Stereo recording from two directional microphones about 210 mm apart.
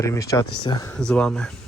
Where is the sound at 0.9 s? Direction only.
5° left (ahead or behind).